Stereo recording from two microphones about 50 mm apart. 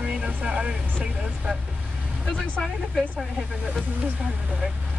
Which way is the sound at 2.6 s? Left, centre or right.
Centre.